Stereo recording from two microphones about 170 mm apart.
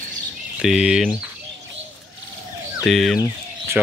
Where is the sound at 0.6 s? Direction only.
5° right (ahead or behind).